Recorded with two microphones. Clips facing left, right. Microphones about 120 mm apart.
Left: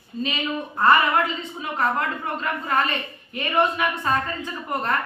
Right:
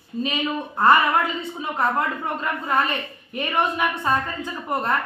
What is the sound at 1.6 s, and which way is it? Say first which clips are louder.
Speech: right 1 dB; 25° right (ahead or behind).